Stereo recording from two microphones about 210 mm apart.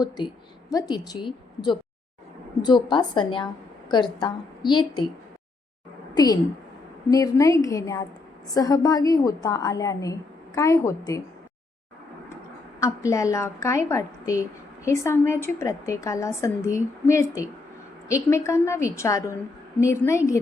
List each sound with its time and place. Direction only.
0.7 s a woman's voice: 20° left (ahead or behind)
6.1 s a woman's voice: 15° left (ahead or behind)
12.8 s a woman's voice: 15° left (ahead or behind)